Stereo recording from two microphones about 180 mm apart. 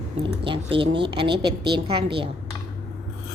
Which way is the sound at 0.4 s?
30° right (ahead or behind).